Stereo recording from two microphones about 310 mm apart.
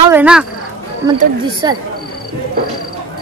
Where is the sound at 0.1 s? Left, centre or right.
Centre.